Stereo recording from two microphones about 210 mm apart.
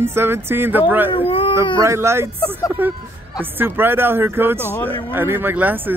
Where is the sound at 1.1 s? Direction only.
25° left (ahead or behind).